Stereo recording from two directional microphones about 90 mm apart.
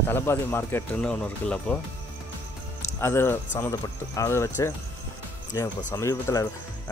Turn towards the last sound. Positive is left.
turn(degrees=35)  # may be behind; listen again after turning